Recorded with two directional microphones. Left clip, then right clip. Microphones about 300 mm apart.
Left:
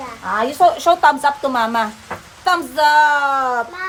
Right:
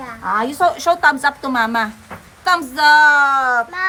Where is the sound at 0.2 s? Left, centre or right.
Centre.